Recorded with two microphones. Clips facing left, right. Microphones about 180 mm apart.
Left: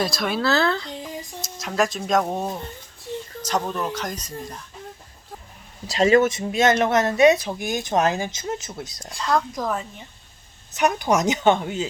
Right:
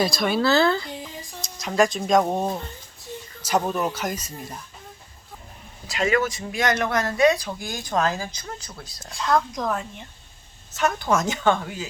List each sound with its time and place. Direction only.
0.0 s a child's voice: centre (ahead or behind)
1.0 s a sound: 20° left (ahead or behind)
1.4 s a child's voice: 5° left (ahead or behind)
5.9 s speech: 30° left (ahead or behind)
9.0 s a child's voice: centre (ahead or behind)
10.8 s speech: 15° left (ahead or behind)